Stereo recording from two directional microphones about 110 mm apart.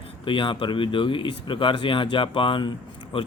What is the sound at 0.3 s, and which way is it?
Speech, 50° left (ahead or behind).